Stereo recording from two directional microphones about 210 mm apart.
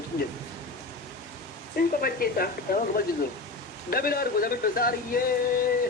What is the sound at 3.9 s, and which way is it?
A man's voice, 45° left (ahead or behind).